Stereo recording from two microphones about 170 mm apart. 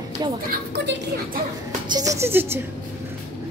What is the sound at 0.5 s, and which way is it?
Speech, 75° right (ahead or behind).